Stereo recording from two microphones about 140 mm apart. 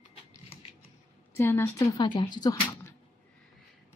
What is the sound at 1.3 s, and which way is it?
Speech, 15° left (ahead or behind).